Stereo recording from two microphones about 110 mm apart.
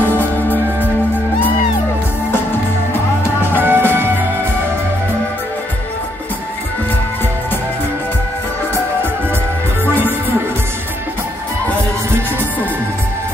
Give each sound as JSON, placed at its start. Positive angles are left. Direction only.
{"t": 0.0, "sound": "music", "side_deg": 15}
{"t": 3.4, "sound": "music", "side_deg": -20}